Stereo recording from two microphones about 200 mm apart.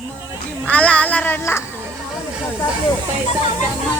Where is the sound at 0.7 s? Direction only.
5° left (ahead or behind).